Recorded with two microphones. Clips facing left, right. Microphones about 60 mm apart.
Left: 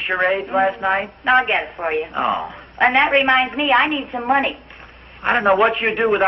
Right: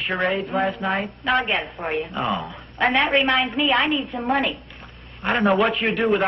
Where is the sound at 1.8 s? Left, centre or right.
Centre.